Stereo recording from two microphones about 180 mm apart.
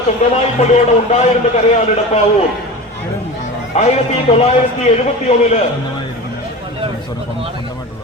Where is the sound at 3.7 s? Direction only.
35° left (ahead or behind).